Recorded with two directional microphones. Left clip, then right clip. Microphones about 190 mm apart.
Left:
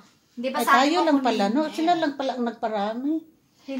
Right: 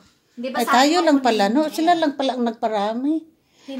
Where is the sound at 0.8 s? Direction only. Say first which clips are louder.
Right 4 dB; 30° right (ahead or behind).